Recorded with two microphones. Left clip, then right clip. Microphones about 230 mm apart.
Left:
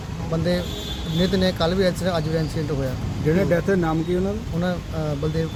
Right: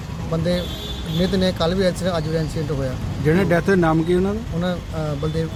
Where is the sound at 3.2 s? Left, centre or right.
Right.